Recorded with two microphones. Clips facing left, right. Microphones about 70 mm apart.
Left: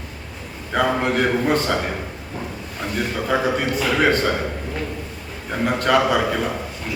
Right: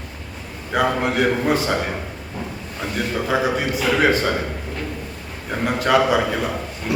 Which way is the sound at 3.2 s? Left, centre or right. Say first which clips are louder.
Left 1 dB; centre.